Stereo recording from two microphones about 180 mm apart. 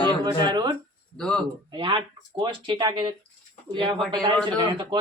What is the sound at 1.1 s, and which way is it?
Speech, 5° left (ahead or behind).